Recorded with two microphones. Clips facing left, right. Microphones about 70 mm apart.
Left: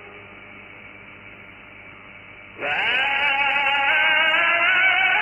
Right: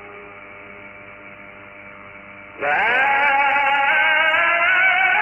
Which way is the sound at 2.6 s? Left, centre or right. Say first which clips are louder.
Right 6 dB; right.